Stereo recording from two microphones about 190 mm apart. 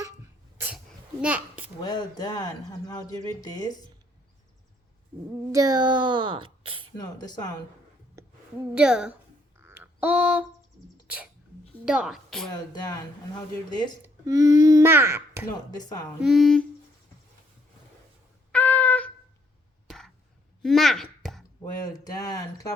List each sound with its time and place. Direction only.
1.2 s a child's voice: 5° right (ahead or behind)
1.8 s speech: 20° left (ahead or behind)
5.5 s a woman's voice: 20° right (ahead or behind)
6.9 s speech: 20° left (ahead or behind)
8.2 s a sound: 15° right (ahead or behind)
8.7 s a woman's voice: 5° right (ahead or behind)
9.6 s a sound: 10° right (ahead or behind)
11.9 s a woman's voice: 5° right (ahead or behind)
12.7 s speech: 20° left (ahead or behind)
14.0 s speech: 15° right (ahead or behind)
16.2 s a woman's voice: centre (ahead or behind)
18.5 s a sound: 10° left (ahead or behind)
20.6 s a sound: centre (ahead or behind)
21.6 s speech: 20° left (ahead or behind)